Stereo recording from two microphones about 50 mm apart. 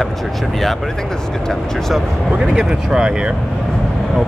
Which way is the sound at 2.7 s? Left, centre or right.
Centre.